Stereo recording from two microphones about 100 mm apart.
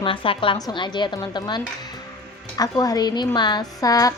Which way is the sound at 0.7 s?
50° left (ahead or behind).